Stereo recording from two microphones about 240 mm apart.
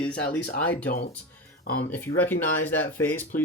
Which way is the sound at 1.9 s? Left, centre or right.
Centre.